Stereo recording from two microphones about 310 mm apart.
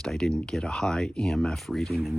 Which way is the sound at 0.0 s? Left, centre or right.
Centre.